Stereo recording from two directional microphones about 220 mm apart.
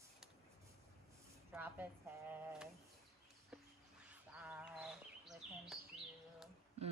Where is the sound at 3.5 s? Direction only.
5° right (ahead or behind).